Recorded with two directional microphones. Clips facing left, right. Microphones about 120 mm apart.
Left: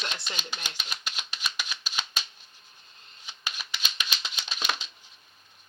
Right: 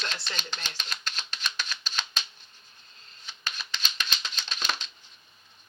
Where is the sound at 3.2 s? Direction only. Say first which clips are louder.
Even; 10° left (ahead or behind).